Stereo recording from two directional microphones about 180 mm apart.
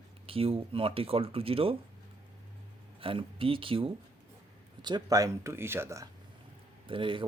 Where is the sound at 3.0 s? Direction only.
30° right (ahead or behind); by 6.0 s 15° right (ahead or behind).